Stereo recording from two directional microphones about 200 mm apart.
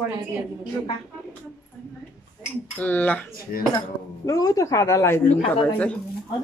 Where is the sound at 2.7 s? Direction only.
10° left (ahead or behind).